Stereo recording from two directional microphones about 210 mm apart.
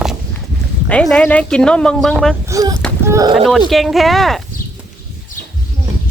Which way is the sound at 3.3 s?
Centre (ahead or behind).